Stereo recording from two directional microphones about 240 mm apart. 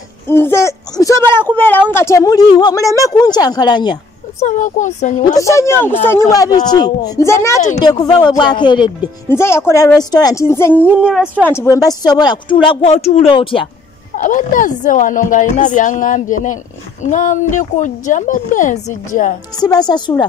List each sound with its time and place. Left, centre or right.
0.3 s a woman's voice: centre
4.5 s speech: left
5.2 s a woman's voice: centre
10.7 s a woman's voice: centre; by 13.7 s left
14.1 s speech: left
19.5 s a woman's voice: centre